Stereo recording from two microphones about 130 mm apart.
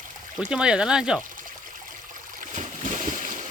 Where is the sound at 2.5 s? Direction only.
75° right (ahead or behind).